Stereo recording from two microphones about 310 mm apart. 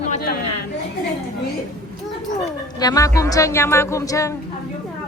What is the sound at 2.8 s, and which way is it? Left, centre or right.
Speech, centre.